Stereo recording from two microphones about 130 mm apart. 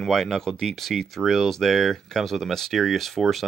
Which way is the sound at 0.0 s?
Centre (ahead or behind).